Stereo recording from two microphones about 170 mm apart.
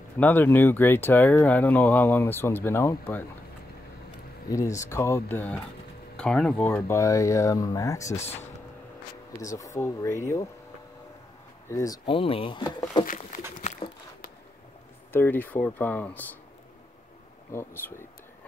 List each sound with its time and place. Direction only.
0.2 s speech: 10° left (ahead or behind)
4.5 s speech: 20° left (ahead or behind)
9.4 s speech: 20° left (ahead or behind)
11.7 s speech: 20° left (ahead or behind)
12.1 s speech: 35° left (ahead or behind)
13.0 s speech: 50° left (ahead or behind)
13.6 s a sound: 45° left (ahead or behind)
15.1 s speech: 10° left (ahead or behind)
17.5 s speech: 15° left (ahead or behind)